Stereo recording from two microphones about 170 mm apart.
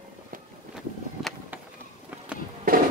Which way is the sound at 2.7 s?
55° right (ahead or behind).